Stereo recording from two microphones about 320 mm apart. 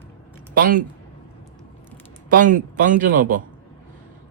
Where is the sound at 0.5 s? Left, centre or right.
Right.